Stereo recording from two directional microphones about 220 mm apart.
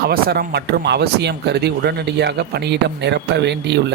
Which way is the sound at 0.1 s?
45° right (ahead or behind).